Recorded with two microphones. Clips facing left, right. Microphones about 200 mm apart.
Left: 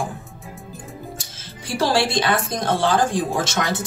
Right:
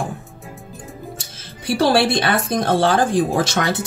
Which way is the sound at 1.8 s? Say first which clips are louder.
Right 3 dB; 60° right (ahead or behind).